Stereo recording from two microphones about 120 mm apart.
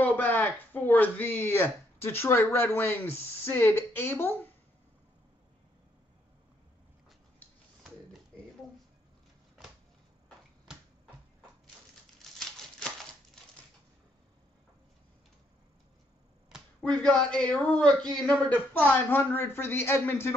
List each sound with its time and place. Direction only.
0.0 s speech: 15° left (ahead or behind)
10.7 s finger snapping: 5° right (ahead or behind)
12.2 s typewriter: 5° left (ahead or behind)
16.5 s a sound: 5° right (ahead or behind)
17.0 s speech: 10° left (ahead or behind)